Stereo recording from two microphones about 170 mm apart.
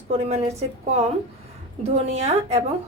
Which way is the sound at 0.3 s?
40° right (ahead or behind).